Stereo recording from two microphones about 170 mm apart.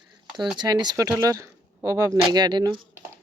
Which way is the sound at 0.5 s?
25° right (ahead or behind).